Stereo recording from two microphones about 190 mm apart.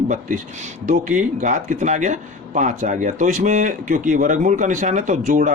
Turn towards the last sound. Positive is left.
turn(degrees=-40)  # may be behind; listen again after turning